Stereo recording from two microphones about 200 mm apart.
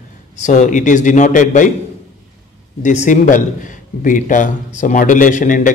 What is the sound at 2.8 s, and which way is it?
A man's voice, 35° left (ahead or behind).